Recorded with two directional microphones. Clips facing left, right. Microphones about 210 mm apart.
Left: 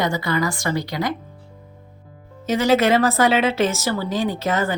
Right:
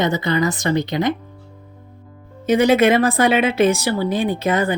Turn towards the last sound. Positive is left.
turn(degrees=-15)  # may be behind; listen again after turning